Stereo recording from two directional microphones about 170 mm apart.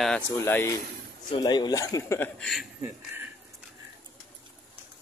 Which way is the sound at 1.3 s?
25° left (ahead or behind).